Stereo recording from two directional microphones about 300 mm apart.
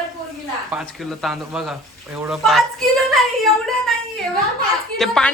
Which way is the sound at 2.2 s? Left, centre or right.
Centre.